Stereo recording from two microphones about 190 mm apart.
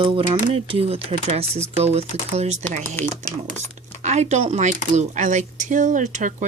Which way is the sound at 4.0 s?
35° right (ahead or behind).